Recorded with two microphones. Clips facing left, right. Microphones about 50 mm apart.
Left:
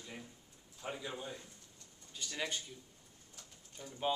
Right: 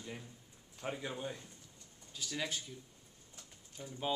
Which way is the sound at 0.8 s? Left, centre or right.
Right.